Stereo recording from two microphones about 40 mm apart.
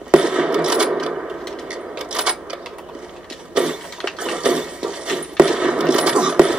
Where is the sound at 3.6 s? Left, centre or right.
Right.